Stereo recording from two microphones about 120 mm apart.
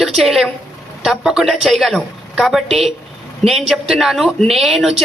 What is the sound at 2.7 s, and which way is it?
Speech, 60° right (ahead or behind).